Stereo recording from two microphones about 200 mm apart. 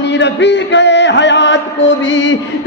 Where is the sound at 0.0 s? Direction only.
60° left (ahead or behind).